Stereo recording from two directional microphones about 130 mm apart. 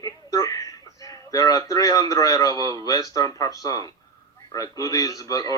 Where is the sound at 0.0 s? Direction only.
25° left (ahead or behind).